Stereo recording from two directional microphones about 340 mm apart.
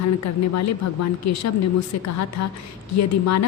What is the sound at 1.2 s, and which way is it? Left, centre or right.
A woman's voice, left.